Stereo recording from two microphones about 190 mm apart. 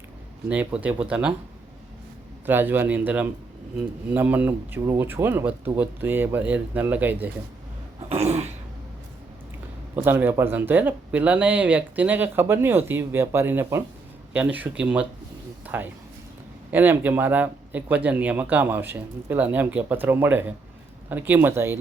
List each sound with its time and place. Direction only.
0.4 s speech: 10° right (ahead or behind)
2.5 s speech: 10° right (ahead or behind)
8.1 s throat clearing: 35° right (ahead or behind)
9.9 s speech: 10° right (ahead or behind)